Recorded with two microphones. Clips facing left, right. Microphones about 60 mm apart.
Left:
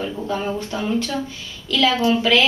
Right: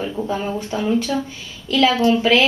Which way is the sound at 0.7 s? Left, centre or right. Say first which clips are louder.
Right 5 dB; centre.